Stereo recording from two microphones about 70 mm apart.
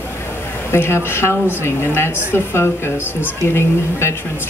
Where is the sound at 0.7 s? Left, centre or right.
Left.